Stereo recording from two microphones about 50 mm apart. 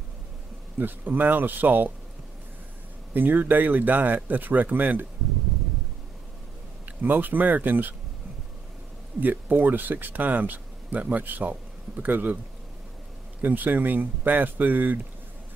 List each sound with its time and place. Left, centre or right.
0.7 s speech: right
3.1 s speech: right
6.9 s speech: right
9.2 s speech: right
13.4 s speech: right